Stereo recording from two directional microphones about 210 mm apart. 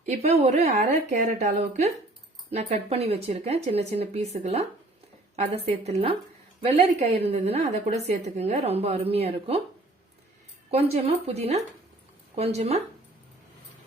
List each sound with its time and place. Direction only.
0.0 s a woman's voice: 30° right (ahead or behind)
7.3 s a woman's voice: 30° right (ahead or behind)
10.7 s a woman's voice: 30° right (ahead or behind)